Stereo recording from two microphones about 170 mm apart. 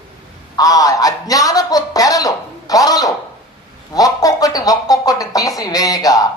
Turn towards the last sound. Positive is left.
turn(degrees=20)  # may be behind; listen again after turning